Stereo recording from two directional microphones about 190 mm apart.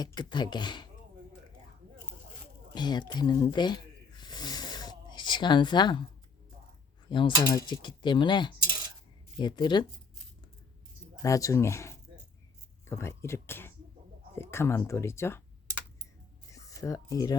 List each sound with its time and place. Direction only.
0.0 s speech: 20° left (ahead or behind)
2.7 s snake: 25° left (ahead or behind)
7.1 s speech: 25° left (ahead or behind)
11.2 s speech: 15° left (ahead or behind)
16.5 s a sound: 15° left (ahead or behind)